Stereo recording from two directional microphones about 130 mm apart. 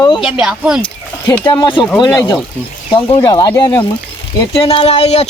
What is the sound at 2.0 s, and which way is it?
Speech, 25° left (ahead or behind).